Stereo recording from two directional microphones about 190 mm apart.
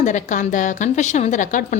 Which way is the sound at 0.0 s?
40° left (ahead or behind).